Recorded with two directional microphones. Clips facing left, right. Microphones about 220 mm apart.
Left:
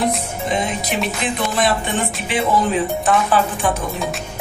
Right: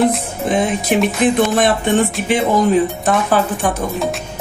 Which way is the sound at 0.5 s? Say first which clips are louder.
Right 6 dB; 50° right (ahead or behind).